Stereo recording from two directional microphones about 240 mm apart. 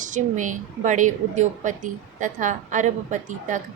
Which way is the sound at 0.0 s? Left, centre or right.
Right.